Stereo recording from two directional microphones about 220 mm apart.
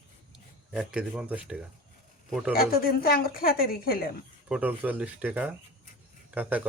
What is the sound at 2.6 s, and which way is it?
Speech, 45° left (ahead or behind).